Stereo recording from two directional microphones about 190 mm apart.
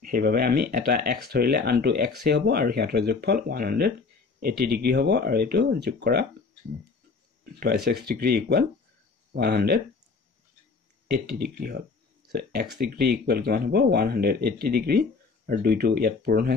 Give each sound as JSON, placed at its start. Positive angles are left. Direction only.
{"t": 0.0, "sound": "speech", "side_deg": -50}
{"t": 7.6, "sound": "speech", "side_deg": -55}
{"t": 11.2, "sound": "speech", "side_deg": -55}